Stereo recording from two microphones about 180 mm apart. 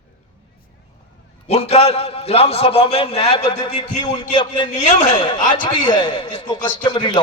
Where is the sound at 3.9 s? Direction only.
20° left (ahead or behind).